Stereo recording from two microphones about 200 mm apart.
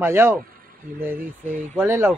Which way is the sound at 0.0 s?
15° right (ahead or behind).